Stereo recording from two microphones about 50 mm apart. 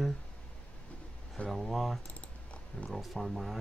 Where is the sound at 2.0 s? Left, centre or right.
Left.